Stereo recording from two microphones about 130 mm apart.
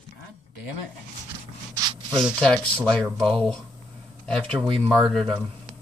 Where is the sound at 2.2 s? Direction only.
5° left (ahead or behind).